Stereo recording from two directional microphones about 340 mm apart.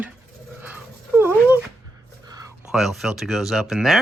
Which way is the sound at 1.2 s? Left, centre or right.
Centre.